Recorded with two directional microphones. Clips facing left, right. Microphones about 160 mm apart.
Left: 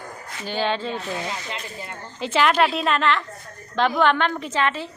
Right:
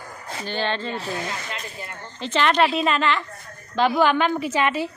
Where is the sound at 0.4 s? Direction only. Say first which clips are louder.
Left 2 dB; 5° left (ahead or behind).